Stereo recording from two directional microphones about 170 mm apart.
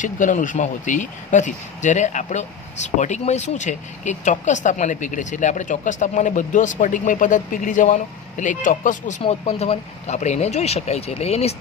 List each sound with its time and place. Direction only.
0.0 s speech: 50° left (ahead or behind)
9.2 s speech: 40° left (ahead or behind)